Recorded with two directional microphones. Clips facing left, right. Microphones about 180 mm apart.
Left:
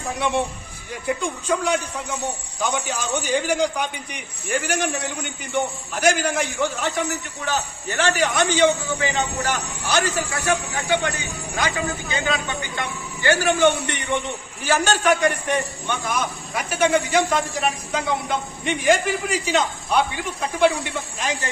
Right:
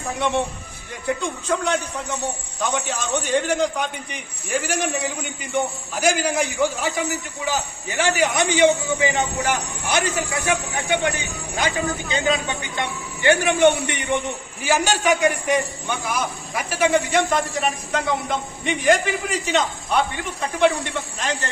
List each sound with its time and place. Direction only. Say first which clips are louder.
0.1 s a man's voice: right 1 dB; centre (ahead or behind); by 11.1 s 20° right (ahead or behind)
12.1 s a man's voice: right 3 dB; 20° right (ahead or behind); by 21.5 s 10° left (ahead or behind)